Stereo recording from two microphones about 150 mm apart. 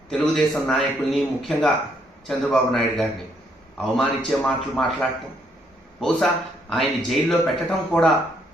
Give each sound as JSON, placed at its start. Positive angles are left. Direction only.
{"t": 0.1, "sound": "a man's voice", "side_deg": 5}